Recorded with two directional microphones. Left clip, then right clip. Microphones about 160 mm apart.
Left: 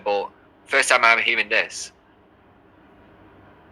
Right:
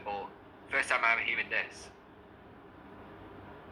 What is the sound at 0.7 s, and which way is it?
Speech, 90° left.